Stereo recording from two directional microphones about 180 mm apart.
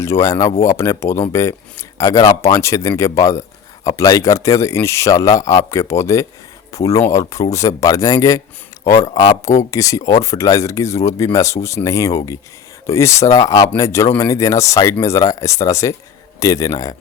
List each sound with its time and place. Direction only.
0.0 s a man's voice: 15° left (ahead or behind)